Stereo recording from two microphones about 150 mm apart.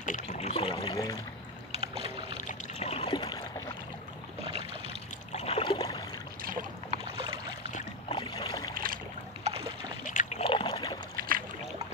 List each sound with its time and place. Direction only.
0.0 s a sound: 55° left (ahead or behind); by 0.9 s 40° left (ahead or behind)
1.7 s boat: 40° right (ahead or behind)
2.4 s boat: 45° left (ahead or behind)
4.5 s boat: 40° right (ahead or behind)
5.3 s a sound: 45° left (ahead or behind)
6.4 s boat: 65° right (ahead or behind)
8.1 s boat: 35° left (ahead or behind)
8.7 s boat: 70° right (ahead or behind)
9.4 s boat: 40° right (ahead or behind)
10.0 s a sound: 55° left (ahead or behind)
10.4 s rowboat: 35° left (ahead or behind)
11.1 s boat: 75° right (ahead or behind)